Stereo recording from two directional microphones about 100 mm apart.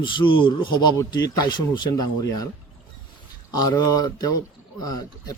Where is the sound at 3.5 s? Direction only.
40° left (ahead or behind).